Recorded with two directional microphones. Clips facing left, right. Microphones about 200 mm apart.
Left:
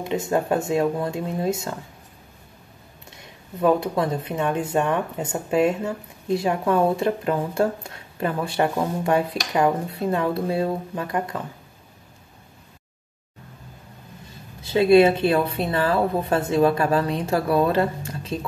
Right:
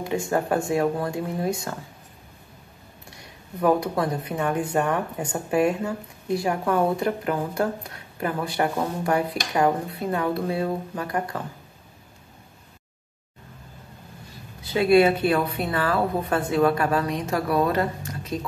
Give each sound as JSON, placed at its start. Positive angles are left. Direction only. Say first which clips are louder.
{"t": 0.0, "sound": "speech", "louder": "left 1 dB", "side_deg": 20}
{"t": 3.1, "sound": "speech", "louder": "left 1 dB", "side_deg": 20}
{"t": 14.6, "sound": "speech", "louder": "left 3 dB", "side_deg": 25}